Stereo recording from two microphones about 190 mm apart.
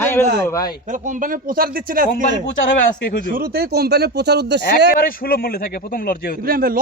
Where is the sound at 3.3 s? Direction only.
55° right (ahead or behind).